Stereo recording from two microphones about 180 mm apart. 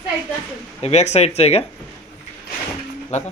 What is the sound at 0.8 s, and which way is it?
Speech, 35° left (ahead or behind).